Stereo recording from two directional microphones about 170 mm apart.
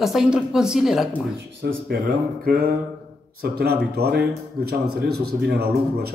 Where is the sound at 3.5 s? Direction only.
70° right (ahead or behind).